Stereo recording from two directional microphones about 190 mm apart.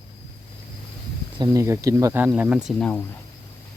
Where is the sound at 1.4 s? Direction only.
15° right (ahead or behind); by 3.0 s 5° left (ahead or behind).